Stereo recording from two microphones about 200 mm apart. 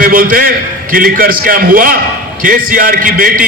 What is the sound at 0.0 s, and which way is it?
A man's voice, 45° right (ahead or behind).